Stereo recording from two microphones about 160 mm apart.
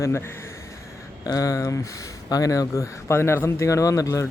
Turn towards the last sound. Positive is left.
turn(degrees=20)  # may be behind; listen again after turning